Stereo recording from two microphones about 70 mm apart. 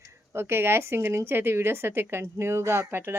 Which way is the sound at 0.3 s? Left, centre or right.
Right.